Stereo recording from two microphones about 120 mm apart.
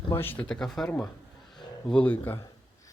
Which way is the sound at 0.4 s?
5° left (ahead or behind).